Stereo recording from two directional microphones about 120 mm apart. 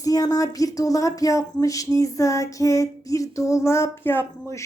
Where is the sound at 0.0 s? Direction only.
30° left (ahead or behind).